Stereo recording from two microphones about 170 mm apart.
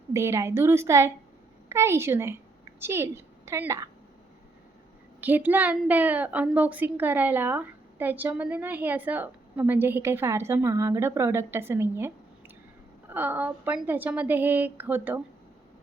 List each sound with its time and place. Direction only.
0.1 s a woman's voice: 15° right (ahead or behind)
5.2 s a woman's voice: 10° right (ahead or behind)